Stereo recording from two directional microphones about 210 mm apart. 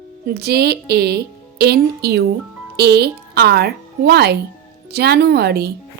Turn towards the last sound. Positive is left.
turn(degrees=-50)  # may be behind; listen again after turning